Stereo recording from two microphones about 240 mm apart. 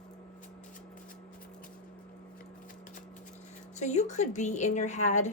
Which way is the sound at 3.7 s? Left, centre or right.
Left.